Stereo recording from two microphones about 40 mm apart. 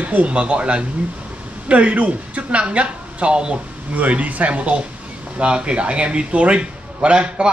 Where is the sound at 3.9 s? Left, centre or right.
Right.